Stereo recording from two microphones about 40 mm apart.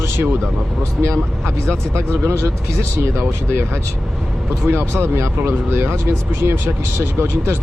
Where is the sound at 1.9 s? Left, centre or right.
Right.